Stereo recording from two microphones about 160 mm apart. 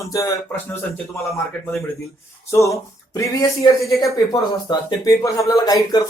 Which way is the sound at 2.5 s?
20° left (ahead or behind).